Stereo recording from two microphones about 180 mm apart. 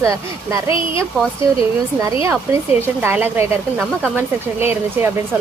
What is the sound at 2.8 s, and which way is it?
Speech, 10° right (ahead or behind).